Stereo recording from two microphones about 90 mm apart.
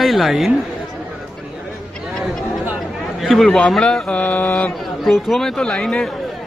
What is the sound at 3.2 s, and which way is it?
A man's voice, centre (ahead or behind).